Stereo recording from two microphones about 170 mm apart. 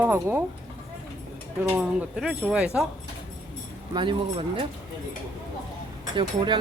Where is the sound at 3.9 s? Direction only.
30° right (ahead or behind).